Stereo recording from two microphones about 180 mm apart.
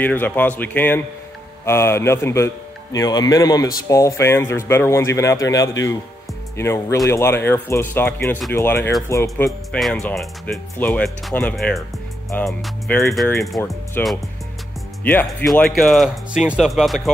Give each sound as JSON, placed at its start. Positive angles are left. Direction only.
{"t": 0.0, "sound": "a man's voice", "side_deg": 10}
{"t": 9.7, "sound": "speech", "side_deg": 0}
{"t": 14.0, "sound": "a man's voice", "side_deg": 10}